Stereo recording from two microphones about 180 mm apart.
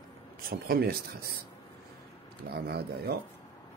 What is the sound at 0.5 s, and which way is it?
Speech, 55° right (ahead or behind).